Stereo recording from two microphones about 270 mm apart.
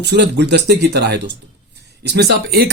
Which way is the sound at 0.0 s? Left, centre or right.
Right.